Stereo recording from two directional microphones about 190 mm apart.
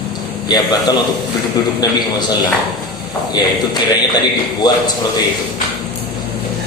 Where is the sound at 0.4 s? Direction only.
20° left (ahead or behind).